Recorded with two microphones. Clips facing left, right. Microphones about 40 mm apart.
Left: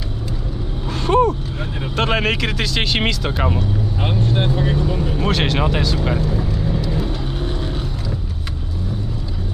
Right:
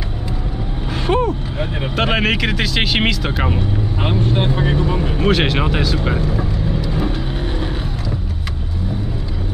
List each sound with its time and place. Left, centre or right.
1.0 s speech: centre
5.3 s speech: centre